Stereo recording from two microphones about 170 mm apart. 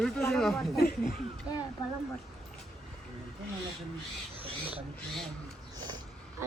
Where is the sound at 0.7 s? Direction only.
60° left (ahead or behind).